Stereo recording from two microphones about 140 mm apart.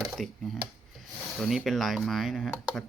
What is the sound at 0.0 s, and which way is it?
Speech, centre (ahead or behind).